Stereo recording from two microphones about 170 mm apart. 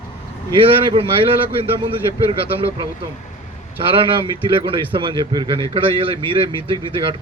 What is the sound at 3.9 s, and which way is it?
A man's voice, 30° right (ahead or behind).